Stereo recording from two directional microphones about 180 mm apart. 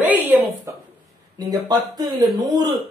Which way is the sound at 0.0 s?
10° right (ahead or behind).